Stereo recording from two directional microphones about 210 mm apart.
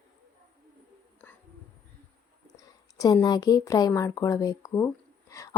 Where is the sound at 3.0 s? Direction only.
20° left (ahead or behind).